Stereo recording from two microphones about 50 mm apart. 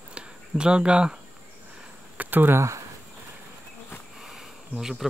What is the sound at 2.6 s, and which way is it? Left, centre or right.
Speech, right.